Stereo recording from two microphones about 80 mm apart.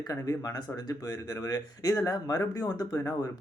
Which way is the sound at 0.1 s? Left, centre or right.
Left.